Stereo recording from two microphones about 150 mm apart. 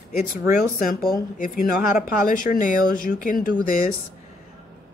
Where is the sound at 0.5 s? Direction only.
70° left (ahead or behind).